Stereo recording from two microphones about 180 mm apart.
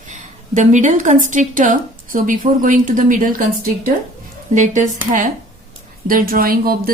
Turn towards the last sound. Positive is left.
turn(degrees=-55)  # may be behind; listen again after turning